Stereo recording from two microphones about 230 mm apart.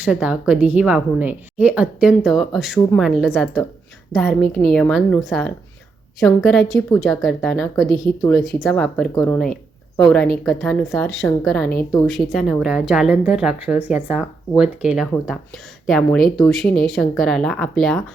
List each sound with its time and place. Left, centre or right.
0.0 s speech: centre
7.9 s speech: centre
8.6 s speech: centre